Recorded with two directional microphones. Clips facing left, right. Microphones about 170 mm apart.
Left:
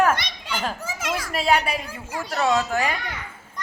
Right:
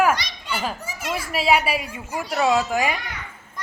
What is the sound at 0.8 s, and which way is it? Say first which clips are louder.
Children playing: left 1 dB; 90° left.